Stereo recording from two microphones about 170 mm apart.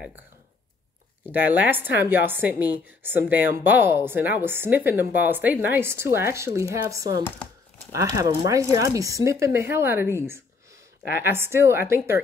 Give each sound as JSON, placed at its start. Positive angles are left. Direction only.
{"t": 1.3, "sound": "a woman's voice", "side_deg": -10}